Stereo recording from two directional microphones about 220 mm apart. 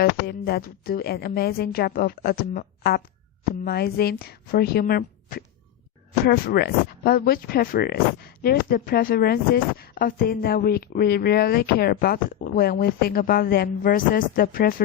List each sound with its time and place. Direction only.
0.0 s speech: 45° left (ahead or behind)